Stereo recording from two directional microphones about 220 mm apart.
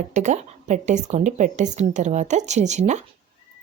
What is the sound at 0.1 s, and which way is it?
Speech, 35° right (ahead or behind).